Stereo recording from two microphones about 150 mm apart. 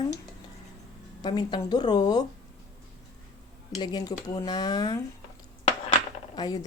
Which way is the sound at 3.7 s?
25° left (ahead or behind).